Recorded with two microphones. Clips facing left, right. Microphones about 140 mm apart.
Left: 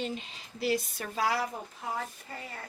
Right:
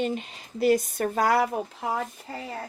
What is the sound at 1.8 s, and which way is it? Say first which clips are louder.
Speech: right 6 dB; 90° right.